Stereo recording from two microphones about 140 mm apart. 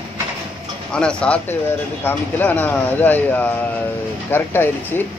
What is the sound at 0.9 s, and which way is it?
Speech, 5° left (ahead or behind).